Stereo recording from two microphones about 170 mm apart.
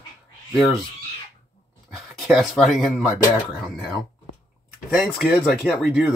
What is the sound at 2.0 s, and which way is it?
Speech, 5° right (ahead or behind).